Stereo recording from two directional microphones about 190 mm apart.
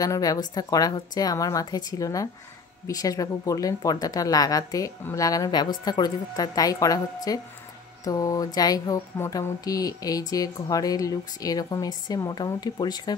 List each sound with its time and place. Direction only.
0.0 s speech: 20° left (ahead or behind)